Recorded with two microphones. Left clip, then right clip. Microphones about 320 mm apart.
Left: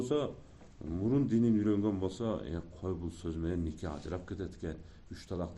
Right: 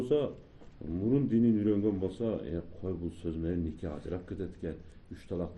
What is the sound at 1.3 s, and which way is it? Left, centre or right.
A man's voice, left.